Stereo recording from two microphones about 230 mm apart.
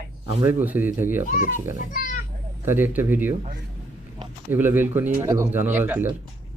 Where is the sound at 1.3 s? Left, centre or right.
Left.